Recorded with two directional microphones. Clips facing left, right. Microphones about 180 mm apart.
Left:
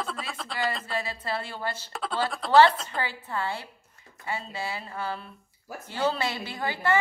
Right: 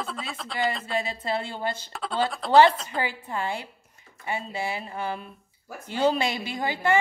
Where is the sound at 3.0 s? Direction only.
15° right (ahead or behind).